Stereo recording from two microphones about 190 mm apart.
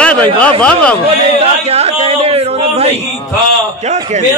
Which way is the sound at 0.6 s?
5° left (ahead or behind).